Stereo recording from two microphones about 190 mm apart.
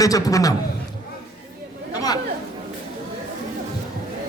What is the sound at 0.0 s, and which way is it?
Speech, 20° left (ahead or behind).